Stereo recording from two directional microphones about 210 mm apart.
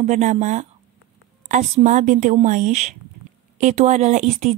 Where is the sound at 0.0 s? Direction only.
35° right (ahead or behind).